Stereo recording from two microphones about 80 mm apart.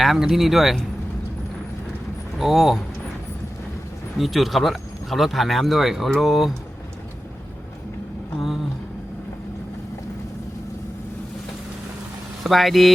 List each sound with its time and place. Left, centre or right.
0.0 s speech: centre
2.4 s speech: centre
4.2 s speech: centre
12.4 s speech: centre